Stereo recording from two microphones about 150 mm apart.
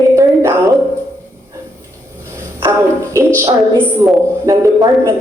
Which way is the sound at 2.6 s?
20° right (ahead or behind).